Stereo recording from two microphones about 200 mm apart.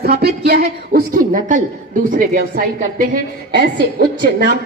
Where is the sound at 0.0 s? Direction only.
50° right (ahead or behind).